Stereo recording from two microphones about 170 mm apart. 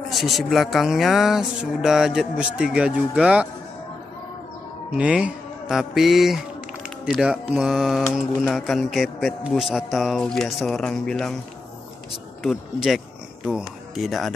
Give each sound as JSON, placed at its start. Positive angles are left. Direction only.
{"t": 0.1, "sound": "speech", "side_deg": 0}
{"t": 4.9, "sound": "speech", "side_deg": -5}
{"t": 12.4, "sound": "speech", "side_deg": 0}